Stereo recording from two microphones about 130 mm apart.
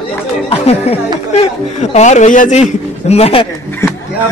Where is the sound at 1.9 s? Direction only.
65° left (ahead or behind); by 3.5 s 50° left (ahead or behind).